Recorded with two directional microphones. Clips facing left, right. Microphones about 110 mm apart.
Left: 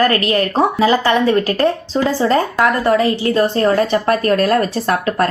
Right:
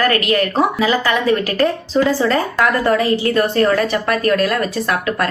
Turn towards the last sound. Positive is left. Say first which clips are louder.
# left 2 dB
turn(degrees=30)  # may be behind; listen again after turning